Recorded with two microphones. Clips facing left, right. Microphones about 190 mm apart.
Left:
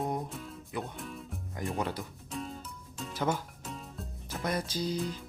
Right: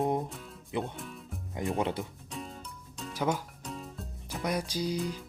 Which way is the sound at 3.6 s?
Centre (ahead or behind).